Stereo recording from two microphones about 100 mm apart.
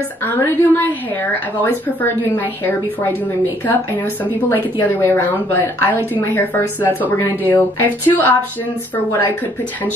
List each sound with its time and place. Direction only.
0.2 s a woman's voice: 20° left (ahead or behind)
3.6 s a woman's voice: 20° left (ahead or behind)